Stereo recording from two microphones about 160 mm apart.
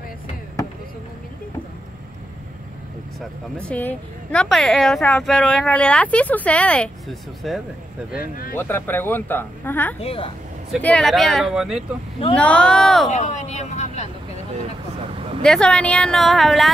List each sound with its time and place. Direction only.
3.2 s a woman's voice: 10° left (ahead or behind)
8.2 s speech: 65° left (ahead or behind)
8.5 s a woman's voice: 15° left (ahead or behind)
9.9 s speech: 35° left (ahead or behind)
10.8 s speech: 5° left (ahead or behind)
13.1 s speech: 50° left (ahead or behind)
15.4 s speech: 5° left (ahead or behind)